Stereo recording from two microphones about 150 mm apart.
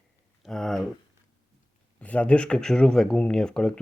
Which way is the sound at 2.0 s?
10° left (ahead or behind).